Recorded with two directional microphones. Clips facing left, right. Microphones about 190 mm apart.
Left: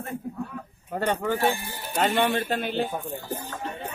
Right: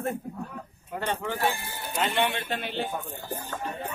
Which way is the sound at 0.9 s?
40° left (ahead or behind).